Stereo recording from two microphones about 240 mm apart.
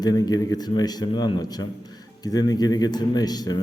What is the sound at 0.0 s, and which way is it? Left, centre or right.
A man's voice, centre.